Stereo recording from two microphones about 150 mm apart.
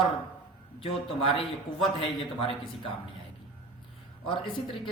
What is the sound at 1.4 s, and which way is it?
Speech, 40° left (ahead or behind).